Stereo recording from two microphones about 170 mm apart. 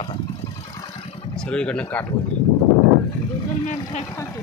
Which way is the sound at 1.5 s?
5° left (ahead or behind).